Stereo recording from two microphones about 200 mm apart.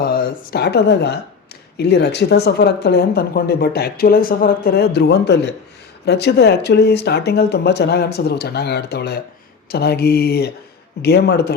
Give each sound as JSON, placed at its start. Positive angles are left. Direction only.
{"t": 0.0, "sound": "speech", "side_deg": 50}